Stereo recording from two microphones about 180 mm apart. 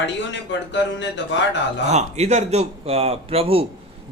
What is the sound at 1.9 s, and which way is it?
A man's voice, 40° right (ahead or behind).